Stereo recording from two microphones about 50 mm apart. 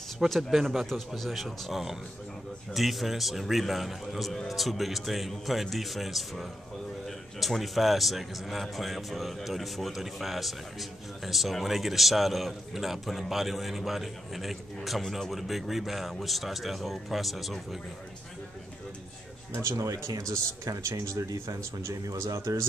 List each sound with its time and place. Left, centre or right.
0.3 s a man's voice: centre
19.5 s speech: right
20.2 s speech: right